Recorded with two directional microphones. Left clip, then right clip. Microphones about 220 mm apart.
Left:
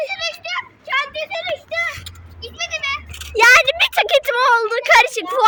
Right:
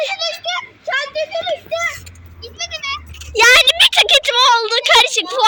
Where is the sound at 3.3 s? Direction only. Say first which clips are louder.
Right 2 dB; 5° left (ahead or behind).